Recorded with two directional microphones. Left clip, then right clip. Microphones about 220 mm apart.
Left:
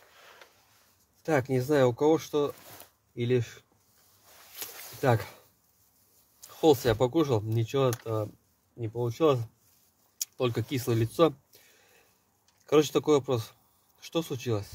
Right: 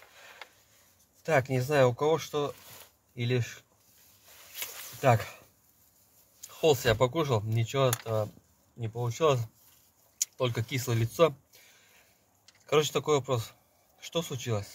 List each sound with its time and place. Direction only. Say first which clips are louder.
1.2 s speech: even; 30° left (ahead or behind)
4.6 s a sound: left 2 dB; 35° left (ahead or behind)
6.4 s speech: left 2 dB; 30° left (ahead or behind)
12.6 s speech: left 3 dB; 35° left (ahead or behind)